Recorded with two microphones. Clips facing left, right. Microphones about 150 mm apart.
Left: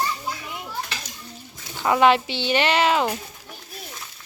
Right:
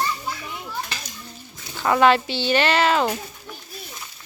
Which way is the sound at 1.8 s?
15° left (ahead or behind).